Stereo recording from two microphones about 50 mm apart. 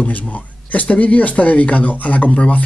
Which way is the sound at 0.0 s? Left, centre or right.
Left.